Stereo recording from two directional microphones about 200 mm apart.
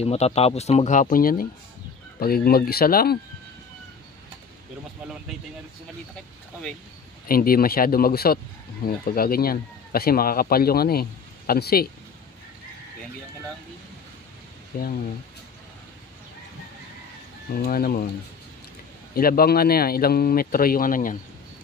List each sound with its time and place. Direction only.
0.0 s speech: 30° left (ahead or behind); by 3.2 s 50° left (ahead or behind)
7.2 s speech: 45° left (ahead or behind)
14.7 s speech: 45° left (ahead or behind)
17.6 s speech: 50° left (ahead or behind)
19.1 s speech: 50° left (ahead or behind)